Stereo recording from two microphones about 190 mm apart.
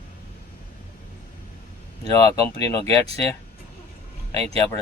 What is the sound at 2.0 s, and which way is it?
Speech, 20° left (ahead or behind).